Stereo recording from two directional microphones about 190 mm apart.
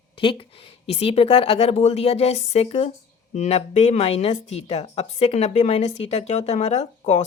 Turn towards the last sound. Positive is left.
turn(degrees=35)  # may be behind; listen again after turning